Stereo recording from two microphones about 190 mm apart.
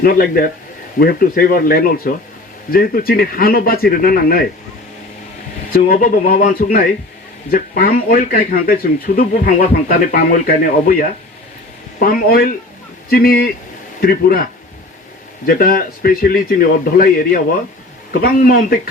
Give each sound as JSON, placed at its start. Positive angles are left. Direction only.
{"t": 0.0, "sound": "speech", "side_deg": 55}
{"t": 5.7, "sound": "speech", "side_deg": 50}
{"t": 15.4, "sound": "speech", "side_deg": 50}